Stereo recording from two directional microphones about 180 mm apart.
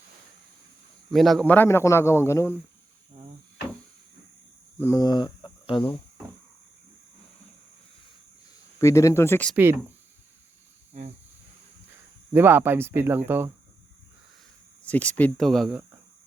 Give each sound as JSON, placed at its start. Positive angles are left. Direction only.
{"t": 1.1, "sound": "a man's voice", "side_deg": 0}
{"t": 4.8, "sound": "speech", "side_deg": 15}
{"t": 8.8, "sound": "a man's voice", "side_deg": 15}
{"t": 12.3, "sound": "speech", "side_deg": -10}
{"t": 14.8, "sound": "speech", "side_deg": 10}